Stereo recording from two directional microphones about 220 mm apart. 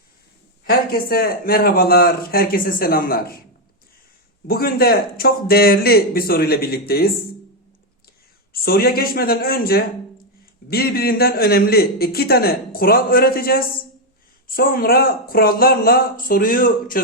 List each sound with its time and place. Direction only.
0.6 s a man's voice: 45° left (ahead or behind)
4.4 s a man's voice: 45° left (ahead or behind)
8.5 s a man's voice: 45° left (ahead or behind)